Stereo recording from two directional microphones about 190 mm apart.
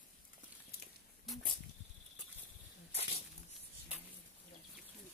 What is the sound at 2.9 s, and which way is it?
Snake, 35° left (ahead or behind).